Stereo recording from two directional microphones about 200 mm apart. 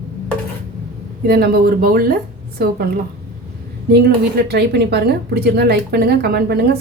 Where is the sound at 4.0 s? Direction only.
50° right (ahead or behind).